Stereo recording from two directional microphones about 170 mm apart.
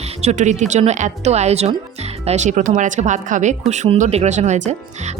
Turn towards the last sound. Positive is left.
turn(degrees=-45)  # may be behind; listen again after turning